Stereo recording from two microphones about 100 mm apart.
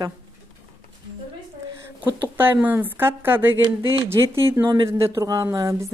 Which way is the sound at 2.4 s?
20° right (ahead or behind).